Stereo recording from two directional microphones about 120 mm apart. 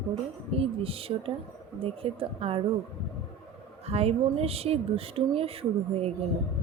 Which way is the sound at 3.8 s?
55° right (ahead or behind).